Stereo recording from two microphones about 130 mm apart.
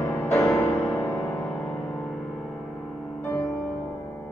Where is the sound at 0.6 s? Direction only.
25° left (ahead or behind).